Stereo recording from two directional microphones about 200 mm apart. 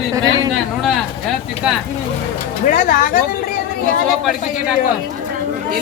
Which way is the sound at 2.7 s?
40° left (ahead or behind).